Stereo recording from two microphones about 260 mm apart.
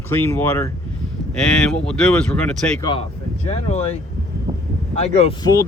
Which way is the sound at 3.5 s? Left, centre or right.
Left.